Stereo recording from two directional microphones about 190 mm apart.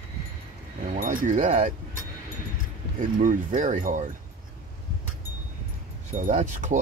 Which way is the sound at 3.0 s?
40° right (ahead or behind).